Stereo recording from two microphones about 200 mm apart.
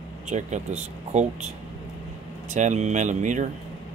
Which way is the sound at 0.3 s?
35° right (ahead or behind).